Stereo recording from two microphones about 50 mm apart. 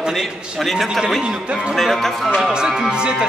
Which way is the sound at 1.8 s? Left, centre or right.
Centre.